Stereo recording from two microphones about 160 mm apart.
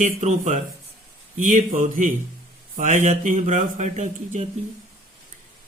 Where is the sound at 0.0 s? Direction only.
50° right (ahead or behind).